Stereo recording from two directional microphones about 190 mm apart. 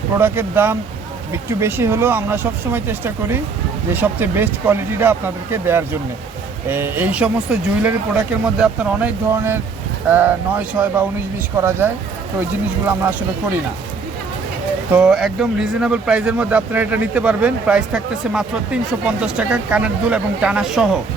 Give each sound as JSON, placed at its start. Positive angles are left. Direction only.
{"t": 0.2, "sound": "speech", "side_deg": -10}
{"t": 14.9, "sound": "speech", "side_deg": 0}